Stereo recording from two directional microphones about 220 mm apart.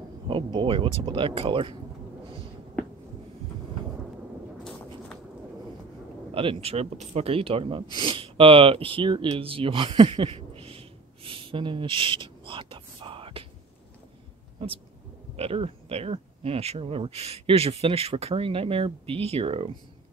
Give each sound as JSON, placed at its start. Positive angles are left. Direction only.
{"t": 0.3, "sound": "speech", "side_deg": -25}
{"t": 6.3, "sound": "speech", "side_deg": -25}
{"t": 15.3, "sound": "speech", "side_deg": -25}